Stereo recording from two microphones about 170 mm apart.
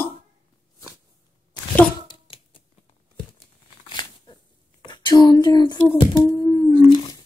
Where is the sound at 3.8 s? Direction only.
25° left (ahead or behind).